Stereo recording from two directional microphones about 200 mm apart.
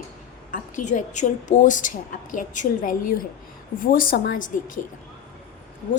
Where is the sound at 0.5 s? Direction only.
40° left (ahead or behind).